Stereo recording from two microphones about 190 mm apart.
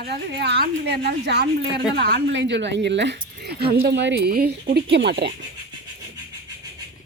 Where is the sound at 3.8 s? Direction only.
65° right (ahead or behind).